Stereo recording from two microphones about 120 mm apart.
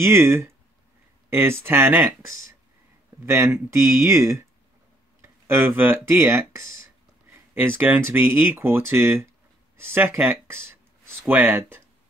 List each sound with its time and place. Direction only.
0.0 s speech: 20° right (ahead or behind)